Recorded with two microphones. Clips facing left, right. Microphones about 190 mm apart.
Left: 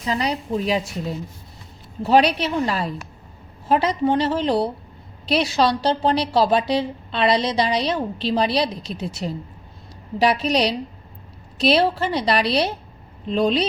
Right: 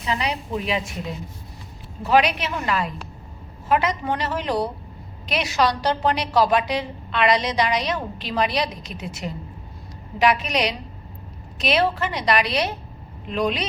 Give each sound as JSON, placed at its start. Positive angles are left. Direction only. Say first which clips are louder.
{"t": 0.0, "sound": "a woman's voice", "louder": "left 2 dB", "side_deg": 35}
{"t": 2.0, "sound": "a woman's voice", "louder": "left 3 dB", "side_deg": 30}